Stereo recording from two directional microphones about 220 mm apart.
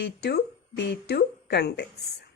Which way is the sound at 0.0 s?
45° left (ahead or behind).